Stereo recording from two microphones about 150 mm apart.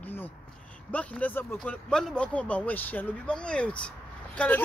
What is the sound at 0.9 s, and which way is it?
Speech, 10° left (ahead or behind).